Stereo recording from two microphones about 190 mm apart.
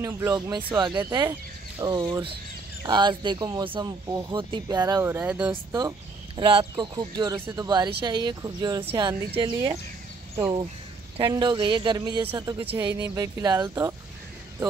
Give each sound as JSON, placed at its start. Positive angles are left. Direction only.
{"t": 0.0, "sound": "speech", "side_deg": -20}
{"t": 5.5, "sound": "speech", "side_deg": -20}